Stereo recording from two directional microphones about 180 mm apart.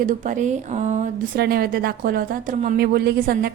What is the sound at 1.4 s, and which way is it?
A woman's voice, 55° right (ahead or behind).